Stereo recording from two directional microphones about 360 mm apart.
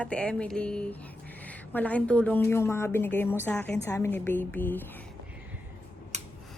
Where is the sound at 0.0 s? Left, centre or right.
Centre.